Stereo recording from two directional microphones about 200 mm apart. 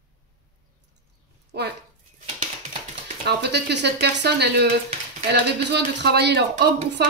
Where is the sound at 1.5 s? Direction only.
55° right (ahead or behind).